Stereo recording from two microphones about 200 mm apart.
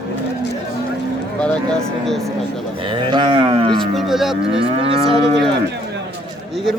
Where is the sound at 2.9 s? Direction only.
25° right (ahead or behind).